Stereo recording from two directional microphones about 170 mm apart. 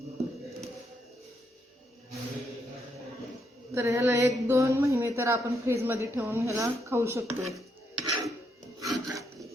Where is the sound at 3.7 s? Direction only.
15° right (ahead or behind).